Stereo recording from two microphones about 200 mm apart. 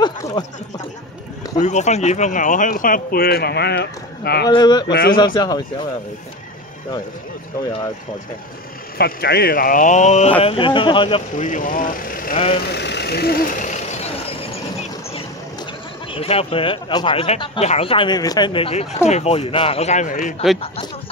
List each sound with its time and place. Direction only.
0.0 s speech: 20° left (ahead or behind)
1.6 s speech: 35° left (ahead or behind); by 4.5 s 55° left (ahead or behind)
4.5 s speech: 20° left (ahead or behind)
8.9 s speech: 55° left (ahead or behind); by 11.2 s 25° left (ahead or behind)
11.3 s speech: 40° left (ahead or behind)
12.6 s speech: 60° left (ahead or behind)
13.9 s vehicle: 30° left (ahead or behind)
16.1 s speech: 30° left (ahead or behind)
20.6 s speech: 30° left (ahead or behind)